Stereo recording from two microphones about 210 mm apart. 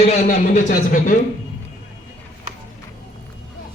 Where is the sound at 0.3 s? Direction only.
40° left (ahead or behind).